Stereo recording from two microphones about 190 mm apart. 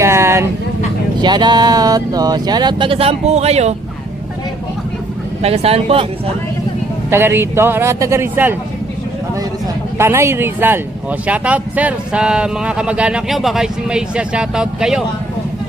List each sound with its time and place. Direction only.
0.0 s vehicle: 15° right (ahead or behind)
1.2 s speech: 25° right (ahead or behind)
5.4 s speech: 30° right (ahead or behind)
7.1 s a man's voice: 10° right (ahead or behind)
10.0 s a man's voice: 15° right (ahead or behind)